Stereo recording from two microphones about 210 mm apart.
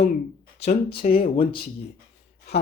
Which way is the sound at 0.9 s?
45° left (ahead or behind).